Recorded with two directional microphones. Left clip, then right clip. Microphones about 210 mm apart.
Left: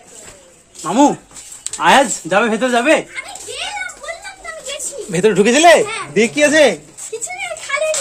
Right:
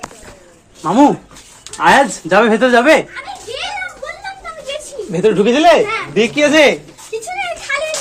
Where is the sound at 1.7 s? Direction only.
15° left (ahead or behind).